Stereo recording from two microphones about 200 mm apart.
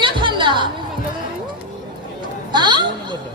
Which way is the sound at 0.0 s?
25° right (ahead or behind).